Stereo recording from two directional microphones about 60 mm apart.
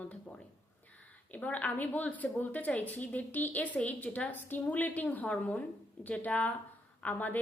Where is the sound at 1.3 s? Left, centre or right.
Left.